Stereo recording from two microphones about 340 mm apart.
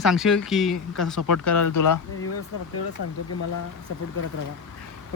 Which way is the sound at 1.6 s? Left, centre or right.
Left.